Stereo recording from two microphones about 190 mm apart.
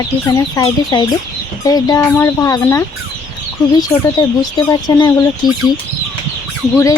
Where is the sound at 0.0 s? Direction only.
20° left (ahead or behind).